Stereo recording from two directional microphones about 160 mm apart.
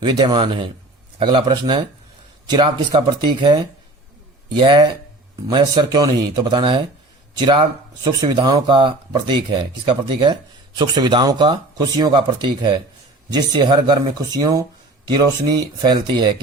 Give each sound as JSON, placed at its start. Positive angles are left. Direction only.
{"t": 0.0, "sound": "speech", "side_deg": -30}
{"t": 15.6, "sound": "speech", "side_deg": -25}